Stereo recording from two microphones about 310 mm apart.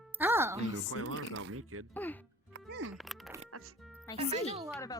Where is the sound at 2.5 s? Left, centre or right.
Right.